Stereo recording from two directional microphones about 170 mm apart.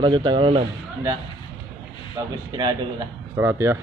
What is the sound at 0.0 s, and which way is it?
Speech, 25° right (ahead or behind).